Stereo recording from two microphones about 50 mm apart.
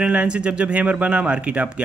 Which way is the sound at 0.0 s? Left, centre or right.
Right.